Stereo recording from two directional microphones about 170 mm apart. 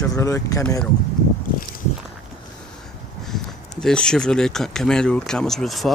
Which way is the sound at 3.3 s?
5° left (ahead or behind).